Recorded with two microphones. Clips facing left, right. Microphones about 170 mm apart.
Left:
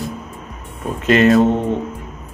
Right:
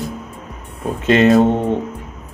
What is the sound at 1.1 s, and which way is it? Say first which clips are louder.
Speech: right 1 dB; 25° right (ahead or behind).